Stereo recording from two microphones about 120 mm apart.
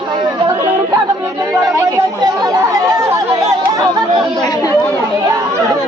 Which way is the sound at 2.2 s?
35° right (ahead or behind).